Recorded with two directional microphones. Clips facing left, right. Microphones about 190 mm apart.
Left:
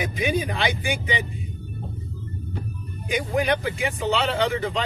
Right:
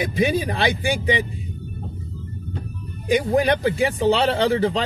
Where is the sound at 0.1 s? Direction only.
35° right (ahead or behind).